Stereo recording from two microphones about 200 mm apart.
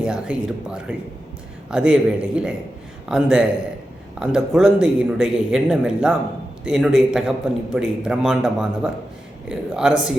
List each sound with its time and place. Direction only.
0.0 s a man's voice: 5° right (ahead or behind)